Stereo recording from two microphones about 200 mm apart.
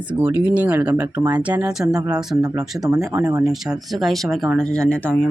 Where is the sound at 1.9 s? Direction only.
20° right (ahead or behind).